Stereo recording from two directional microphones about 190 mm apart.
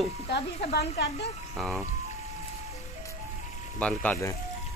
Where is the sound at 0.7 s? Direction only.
60° left (ahead or behind).